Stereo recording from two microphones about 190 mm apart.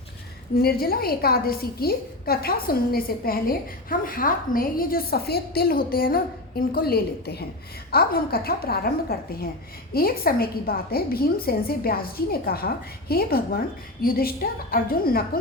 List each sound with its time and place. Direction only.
0.5 s a woman's voice: 55° left (ahead or behind)